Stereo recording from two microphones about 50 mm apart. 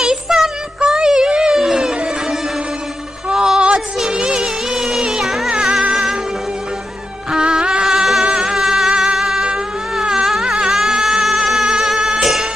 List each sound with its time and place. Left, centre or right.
0.0 s child singing: centre
0.8 s a sound: centre
3.3 s music: centre
7.2 s music: centre
10.0 s a sound: centre
11.7 s music: centre